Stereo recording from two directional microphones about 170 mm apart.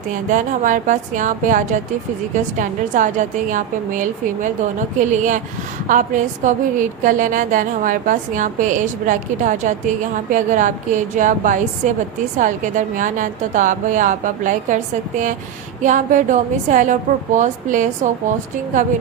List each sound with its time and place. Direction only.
0.1 s a woman's voice: 50° right (ahead or behind)
15.8 s a woman's voice: 50° right (ahead or behind)